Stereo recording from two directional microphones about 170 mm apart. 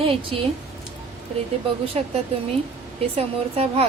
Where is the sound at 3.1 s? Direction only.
35° right (ahead or behind).